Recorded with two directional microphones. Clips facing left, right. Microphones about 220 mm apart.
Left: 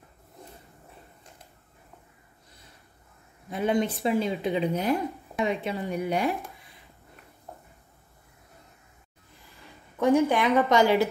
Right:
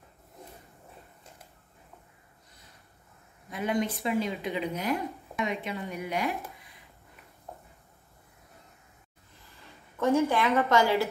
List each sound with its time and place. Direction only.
3.4 s speech: 30° left (ahead or behind)
9.9 s a woman's voice: 15° left (ahead or behind)